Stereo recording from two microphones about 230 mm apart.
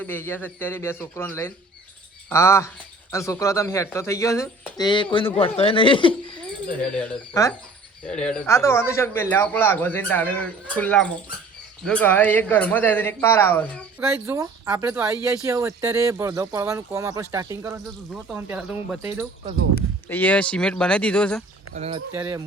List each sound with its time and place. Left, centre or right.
0.0 s speech: centre
2.3 s speech: centre
14.1 s speech: centre
20.1 s speech: centre
21.8 s speech: right
22.1 s speech: centre